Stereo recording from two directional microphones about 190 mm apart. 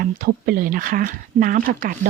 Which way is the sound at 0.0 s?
50° right (ahead or behind).